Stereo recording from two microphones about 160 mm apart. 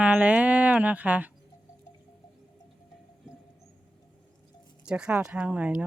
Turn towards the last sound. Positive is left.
turn(degrees=-10)  # may be behind; listen again after turning